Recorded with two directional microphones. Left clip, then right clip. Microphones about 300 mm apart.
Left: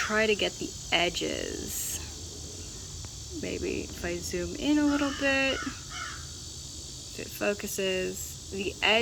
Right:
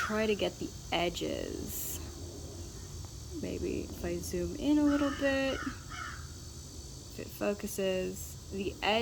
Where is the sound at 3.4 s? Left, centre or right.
Centre.